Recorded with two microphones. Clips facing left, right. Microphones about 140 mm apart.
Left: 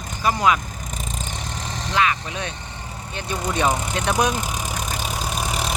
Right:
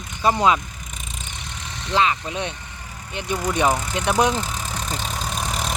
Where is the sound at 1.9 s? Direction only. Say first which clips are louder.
Right 2 dB; 25° right (ahead or behind).